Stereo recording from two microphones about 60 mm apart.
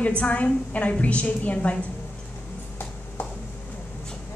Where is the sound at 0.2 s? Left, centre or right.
Left.